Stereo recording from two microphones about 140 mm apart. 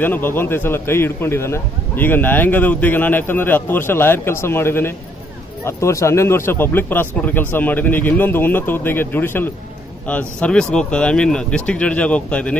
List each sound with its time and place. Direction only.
0.0 s a man's voice: 15° left (ahead or behind)